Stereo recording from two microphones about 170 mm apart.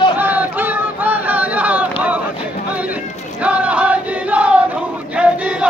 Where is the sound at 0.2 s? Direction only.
10° right (ahead or behind).